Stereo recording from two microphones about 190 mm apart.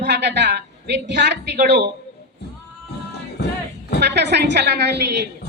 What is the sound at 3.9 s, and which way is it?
A woman's voice, 65° right (ahead or behind).